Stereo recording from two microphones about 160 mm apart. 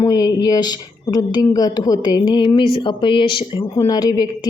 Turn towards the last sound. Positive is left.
turn(degrees=25)  # may be behind; listen again after turning